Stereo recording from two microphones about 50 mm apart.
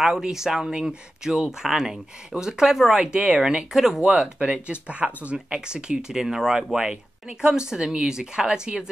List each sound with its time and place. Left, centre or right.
0.0 s speech: centre
4.1 s speech: centre
4.5 s speech: right